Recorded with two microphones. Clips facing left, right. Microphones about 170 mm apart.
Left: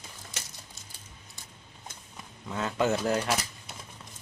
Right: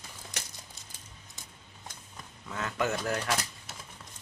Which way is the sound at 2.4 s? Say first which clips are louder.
Left 4 dB; 20° left (ahead or behind).